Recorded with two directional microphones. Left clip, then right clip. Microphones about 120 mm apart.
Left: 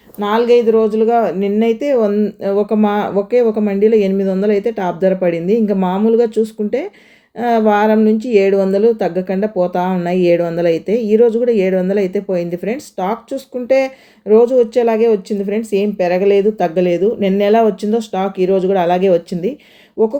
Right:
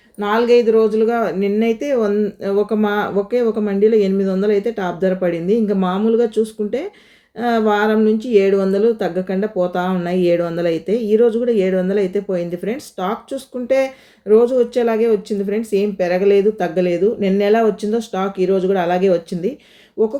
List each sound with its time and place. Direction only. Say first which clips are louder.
0.2 s speech: left 2 dB; 35° left (ahead or behind)